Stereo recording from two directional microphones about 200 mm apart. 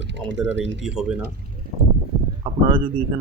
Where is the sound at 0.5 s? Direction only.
65° right (ahead or behind).